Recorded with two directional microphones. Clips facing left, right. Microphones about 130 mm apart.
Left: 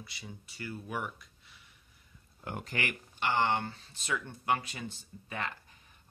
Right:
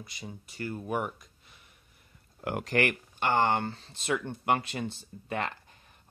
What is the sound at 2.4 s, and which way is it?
Speech, 80° right.